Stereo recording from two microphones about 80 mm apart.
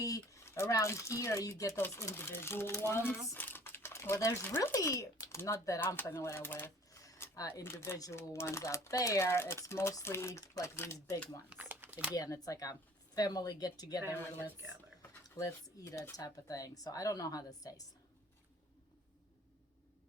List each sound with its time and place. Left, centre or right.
0.4 s speech: left
1.8 s speech: left
3.6 s crumpling: left
4.7 s speech: left
5.8 s speech: left
10.4 s speech: left
10.8 s speech: left
11.4 s crumpling: right
12.1 s a woman's voice: left
15.4 s a woman's voice: left